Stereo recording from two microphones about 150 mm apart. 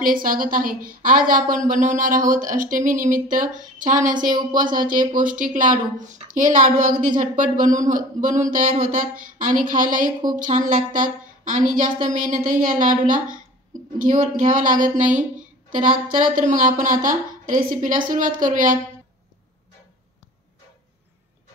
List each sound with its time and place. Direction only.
0.0 s a woman's voice: 65° right (ahead or behind)
4.3 s speech: 30° right (ahead or behind)
4.7 s a woman's voice: 65° right (ahead or behind)